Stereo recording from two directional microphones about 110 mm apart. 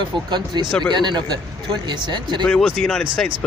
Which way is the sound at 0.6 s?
5° left (ahead or behind).